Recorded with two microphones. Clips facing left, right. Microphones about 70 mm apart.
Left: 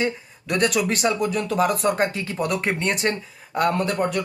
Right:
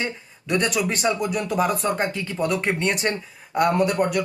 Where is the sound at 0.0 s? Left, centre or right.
Centre.